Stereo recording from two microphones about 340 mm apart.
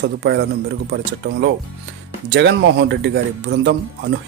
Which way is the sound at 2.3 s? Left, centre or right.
Right.